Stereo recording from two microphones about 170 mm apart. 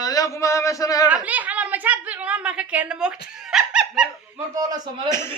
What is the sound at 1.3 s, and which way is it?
A woman's voice, 10° right (ahead or behind).